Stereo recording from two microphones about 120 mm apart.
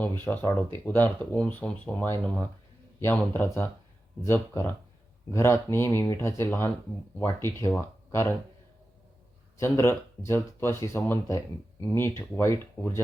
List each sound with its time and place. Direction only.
0.0 s speech: 15° left (ahead or behind)
9.6 s speech: 20° left (ahead or behind)